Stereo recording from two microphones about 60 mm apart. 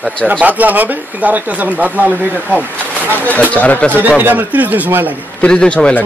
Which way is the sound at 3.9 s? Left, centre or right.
Right.